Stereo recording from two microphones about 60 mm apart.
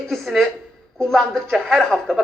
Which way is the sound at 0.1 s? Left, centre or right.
Centre.